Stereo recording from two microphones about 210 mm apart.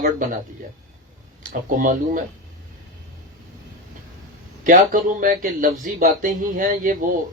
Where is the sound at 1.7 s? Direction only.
40° right (ahead or behind).